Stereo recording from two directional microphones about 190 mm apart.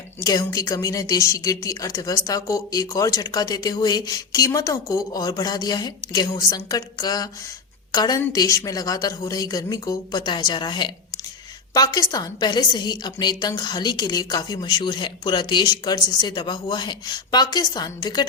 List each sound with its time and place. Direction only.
0.2 s a woman's voice: 20° left (ahead or behind)